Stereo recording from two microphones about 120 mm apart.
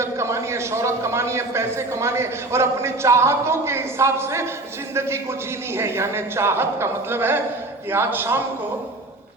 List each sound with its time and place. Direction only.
0.0 s a man's voice: 25° right (ahead or behind)